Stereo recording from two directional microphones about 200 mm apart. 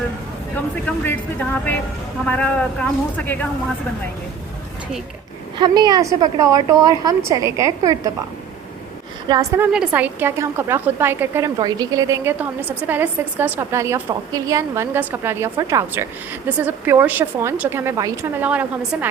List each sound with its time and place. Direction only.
1.0 s speech: 10° left (ahead or behind)
5.5 s a woman's voice: 20° right (ahead or behind)
9.3 s a woman's voice: 15° right (ahead or behind)